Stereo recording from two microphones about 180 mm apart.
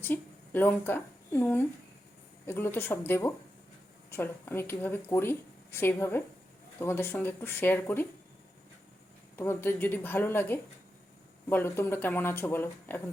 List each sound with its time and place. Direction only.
0.0 s a woman's voice: 10° left (ahead or behind)
9.3 s speech: 10° left (ahead or behind)